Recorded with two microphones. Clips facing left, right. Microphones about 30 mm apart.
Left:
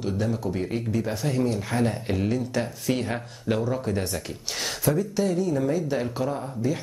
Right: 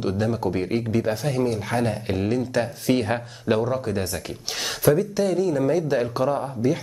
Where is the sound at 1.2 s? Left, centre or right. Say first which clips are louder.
Right 2 dB; centre.